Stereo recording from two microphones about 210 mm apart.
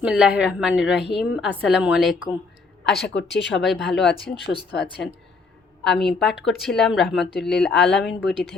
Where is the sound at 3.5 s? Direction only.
Centre (ahead or behind).